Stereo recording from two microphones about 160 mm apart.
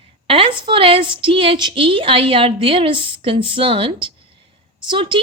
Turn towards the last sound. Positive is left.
turn(degrees=-30)  # may be behind; listen again after turning